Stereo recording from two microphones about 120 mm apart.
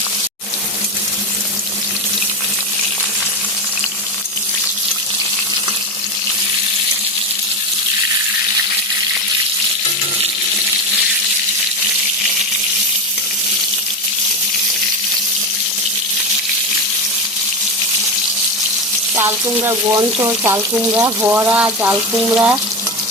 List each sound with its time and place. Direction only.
19.1 s water tap: 25° right (ahead or behind)
20.2 s frying: 25° right (ahead or behind)